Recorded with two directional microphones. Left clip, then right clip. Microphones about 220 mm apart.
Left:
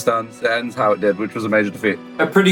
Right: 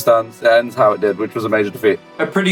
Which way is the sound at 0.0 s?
25° left (ahead or behind).